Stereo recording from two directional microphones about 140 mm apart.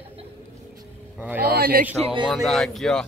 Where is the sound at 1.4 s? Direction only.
90° right.